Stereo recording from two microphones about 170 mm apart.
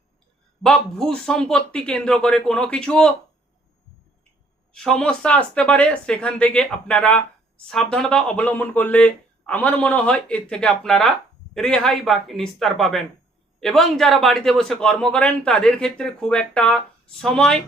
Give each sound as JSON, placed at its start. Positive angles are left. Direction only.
{"t": 0.6, "sound": "a man's voice", "side_deg": 5}
{"t": 4.7, "sound": "a man's voice", "side_deg": 5}